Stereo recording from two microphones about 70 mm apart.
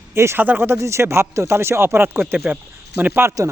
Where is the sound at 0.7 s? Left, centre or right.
Right.